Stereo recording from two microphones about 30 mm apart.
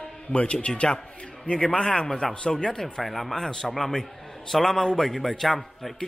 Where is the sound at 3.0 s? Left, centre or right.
Centre.